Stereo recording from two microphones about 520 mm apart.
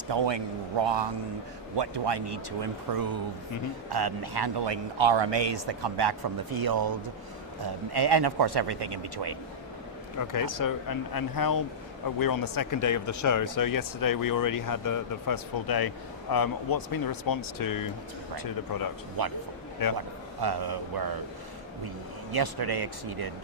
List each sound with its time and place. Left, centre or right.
0.1 s a man's voice: right
10.2 s speech: left
19.2 s a man's voice: right
19.8 s speech: left
20.4 s speech: right
22.3 s speech: right